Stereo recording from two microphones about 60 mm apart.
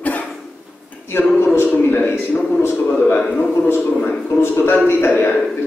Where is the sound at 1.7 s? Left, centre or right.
Left.